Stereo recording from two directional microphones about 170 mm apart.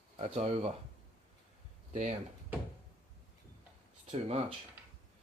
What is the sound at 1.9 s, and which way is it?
Speech, 45° right (ahead or behind).